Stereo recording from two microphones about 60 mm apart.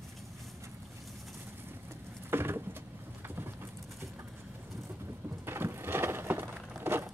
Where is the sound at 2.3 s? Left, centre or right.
Right.